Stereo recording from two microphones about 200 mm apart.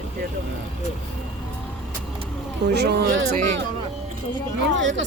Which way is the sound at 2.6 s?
55° right (ahead or behind).